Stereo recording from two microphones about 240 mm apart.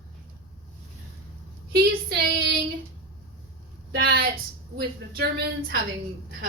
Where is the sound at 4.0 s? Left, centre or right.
Right.